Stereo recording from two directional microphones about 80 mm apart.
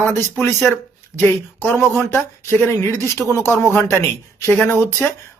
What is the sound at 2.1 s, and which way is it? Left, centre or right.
Speech, left.